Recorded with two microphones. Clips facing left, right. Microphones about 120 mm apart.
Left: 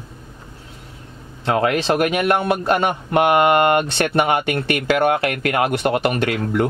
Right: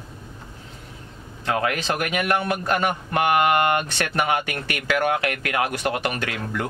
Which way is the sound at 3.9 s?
25° left (ahead or behind).